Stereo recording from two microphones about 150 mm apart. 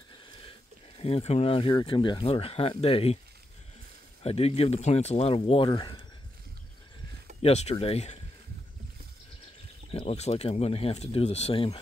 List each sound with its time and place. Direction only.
0.4 s a sound: 40° left (ahead or behind)
1.8 s speech: 30° left (ahead or behind)
4.2 s speech: 40° left (ahead or behind)
7.4 s speech: 45° left (ahead or behind)
9.8 s speech: 40° left (ahead or behind)